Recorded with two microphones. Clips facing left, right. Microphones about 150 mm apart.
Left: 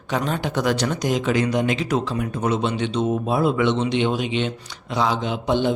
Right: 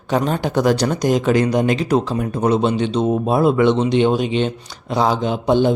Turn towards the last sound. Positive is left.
turn(degrees=-40)  # may be behind; listen again after turning